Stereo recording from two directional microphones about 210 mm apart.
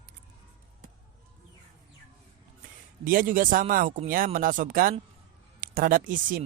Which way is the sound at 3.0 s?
40° right (ahead or behind).